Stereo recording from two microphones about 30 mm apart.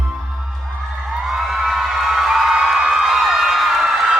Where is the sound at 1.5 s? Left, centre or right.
Centre.